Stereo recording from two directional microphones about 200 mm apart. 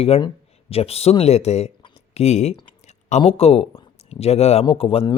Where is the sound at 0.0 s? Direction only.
30° left (ahead or behind).